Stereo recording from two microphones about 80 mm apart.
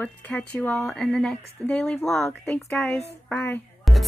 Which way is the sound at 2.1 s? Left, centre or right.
Left.